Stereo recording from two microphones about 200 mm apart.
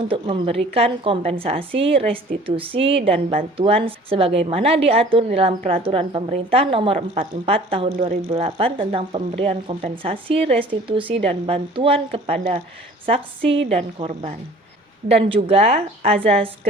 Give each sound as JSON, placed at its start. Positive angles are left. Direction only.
{"t": 0.1, "sound": "a woman's voice", "side_deg": -30}